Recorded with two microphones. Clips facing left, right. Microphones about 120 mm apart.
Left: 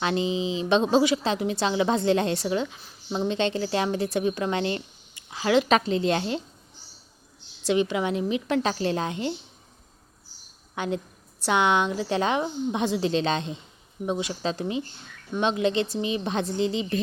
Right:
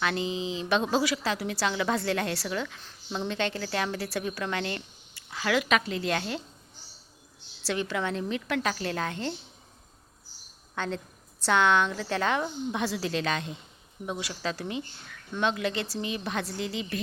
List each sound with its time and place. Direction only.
0.0 s a woman's voice: 20° left (ahead or behind)
7.6 s a woman's voice: 20° left (ahead or behind)
10.8 s a woman's voice: 15° left (ahead or behind)